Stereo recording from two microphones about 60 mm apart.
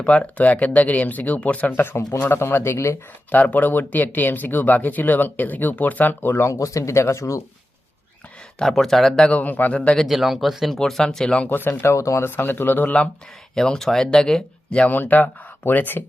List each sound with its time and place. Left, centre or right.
0.0 s speech: left
3.3 s speech: left
6.5 s speech: left
8.5 s speech: centre
9.4 s speech: left
10.1 s speech: centre
11.4 s speech: left
11.8 s speech: left
12.3 s speech: left
13.6 s speech: centre
14.8 s speech: left